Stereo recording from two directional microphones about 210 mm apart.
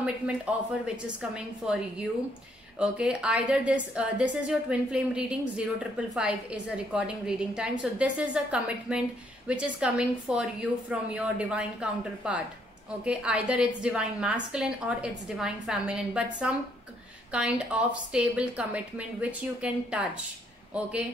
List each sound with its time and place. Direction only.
0.0 s a woman's voice: 5° right (ahead or behind)